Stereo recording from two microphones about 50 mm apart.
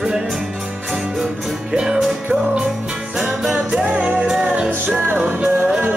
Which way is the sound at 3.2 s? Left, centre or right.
Centre.